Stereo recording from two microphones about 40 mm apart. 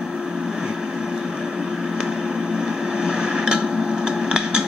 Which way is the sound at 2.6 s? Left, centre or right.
Centre.